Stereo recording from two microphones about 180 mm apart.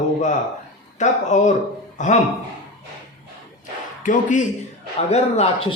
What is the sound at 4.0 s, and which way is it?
Speech, 45° left (ahead or behind).